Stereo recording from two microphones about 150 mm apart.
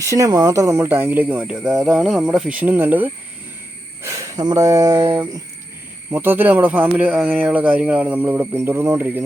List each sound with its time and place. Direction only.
0.0 s speech: 20° right (ahead or behind)
6.1 s speech: 15° right (ahead or behind)